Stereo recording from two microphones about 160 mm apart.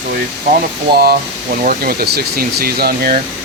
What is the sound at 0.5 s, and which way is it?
Speech, 75° right (ahead or behind).